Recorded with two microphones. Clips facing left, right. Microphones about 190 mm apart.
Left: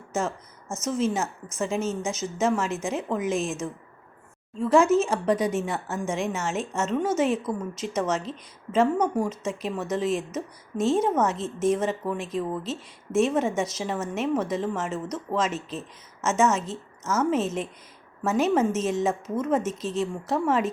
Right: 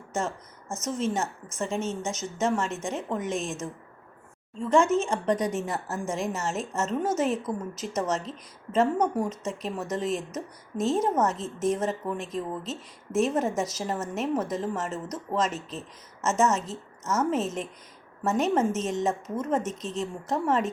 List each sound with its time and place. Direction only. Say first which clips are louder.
0.9 s a woman's voice: left 3 dB; 5° left (ahead or behind)
3.2 s speech: left 4 dB; 35° right (ahead or behind)
4.7 s a woman's voice: left 3 dB; 5° left (ahead or behind)